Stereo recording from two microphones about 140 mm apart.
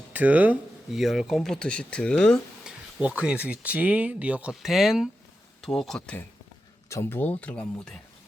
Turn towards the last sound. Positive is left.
turn(degrees=10)  # may be behind; listen again after turning